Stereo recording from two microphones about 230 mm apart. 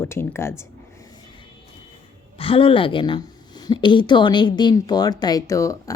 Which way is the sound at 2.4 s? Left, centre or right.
Left.